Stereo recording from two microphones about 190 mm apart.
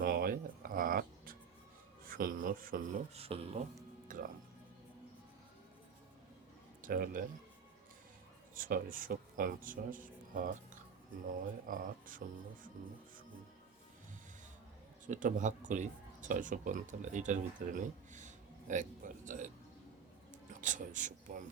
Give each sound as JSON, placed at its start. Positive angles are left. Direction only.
{"t": 0.0, "sound": "a sound", "side_deg": -50}
{"t": 2.0, "sound": "speech", "side_deg": -45}
{"t": 4.1, "sound": "music", "side_deg": -45}
{"t": 6.8, "sound": "a man's voice", "side_deg": -45}
{"t": 8.5, "sound": "a man's voice", "side_deg": -45}
{"t": 11.7, "sound": "a man's voice", "side_deg": -45}
{"t": 15.0, "sound": "speech", "side_deg": -40}
{"t": 20.5, "sound": "speech", "side_deg": -40}